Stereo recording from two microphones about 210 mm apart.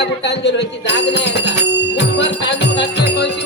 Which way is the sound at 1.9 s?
55° left (ahead or behind).